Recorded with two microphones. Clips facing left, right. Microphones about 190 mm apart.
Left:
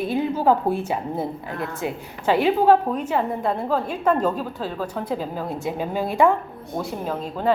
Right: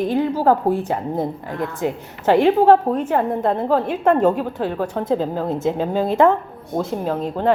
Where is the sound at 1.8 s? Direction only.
15° left (ahead or behind).